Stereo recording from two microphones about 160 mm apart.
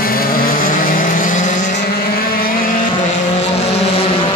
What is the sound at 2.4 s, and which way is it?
Vehicle, 60° left (ahead or behind).